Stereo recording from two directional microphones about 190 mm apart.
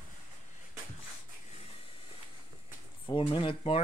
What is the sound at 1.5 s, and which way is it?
Vehicle, 30° left (ahead or behind).